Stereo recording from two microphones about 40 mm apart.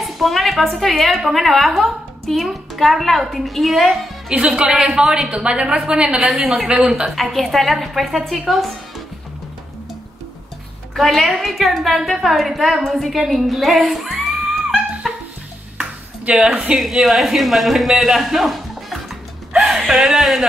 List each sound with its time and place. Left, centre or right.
0.0 s a woman's voice: centre
4.6 s a woman's voice: right
6.1 s a woman's voice: centre
11.0 s a woman's voice: centre
15.0 s dog: centre
16.3 s a man's voice: centre